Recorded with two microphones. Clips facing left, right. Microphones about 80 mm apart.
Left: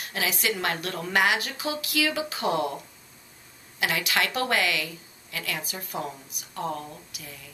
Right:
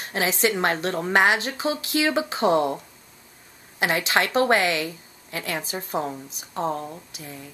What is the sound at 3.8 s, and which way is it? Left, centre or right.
A woman's voice, right.